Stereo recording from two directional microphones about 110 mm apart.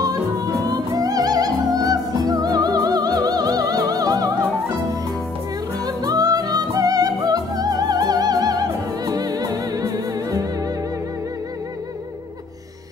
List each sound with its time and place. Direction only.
0.7 s music: 35° right (ahead or behind)
5.9 s music: 35° right (ahead or behind)